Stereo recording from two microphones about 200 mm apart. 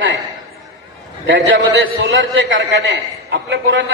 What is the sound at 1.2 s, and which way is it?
A man's voice, 65° right (ahead or behind).